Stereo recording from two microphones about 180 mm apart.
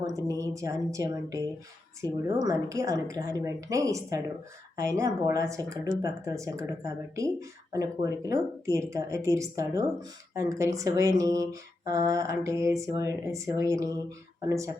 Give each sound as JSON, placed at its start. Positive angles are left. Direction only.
{"t": 0.2, "sound": "speech", "side_deg": -20}